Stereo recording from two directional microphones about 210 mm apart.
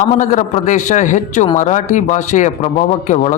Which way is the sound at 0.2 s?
35° left (ahead or behind).